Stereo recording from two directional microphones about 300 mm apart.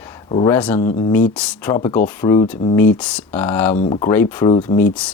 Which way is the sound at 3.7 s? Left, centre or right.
Left.